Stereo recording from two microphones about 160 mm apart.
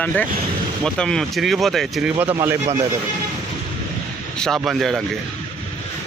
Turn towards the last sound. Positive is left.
turn(degrees=0)  # may be behind; listen again after turning